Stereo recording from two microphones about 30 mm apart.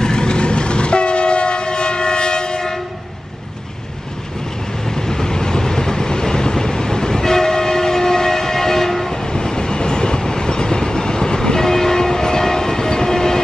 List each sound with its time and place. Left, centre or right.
0.0 s train: left
4.8 s train: centre